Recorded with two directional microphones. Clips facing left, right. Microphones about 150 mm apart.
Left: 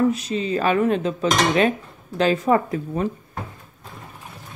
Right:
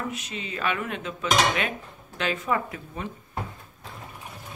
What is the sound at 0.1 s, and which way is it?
Dishes, 35° left (ahead or behind).